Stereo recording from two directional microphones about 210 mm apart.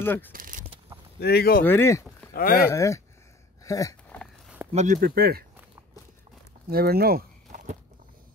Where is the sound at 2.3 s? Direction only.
45° left (ahead or behind).